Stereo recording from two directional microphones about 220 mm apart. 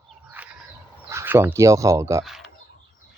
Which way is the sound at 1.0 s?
10° right (ahead or behind).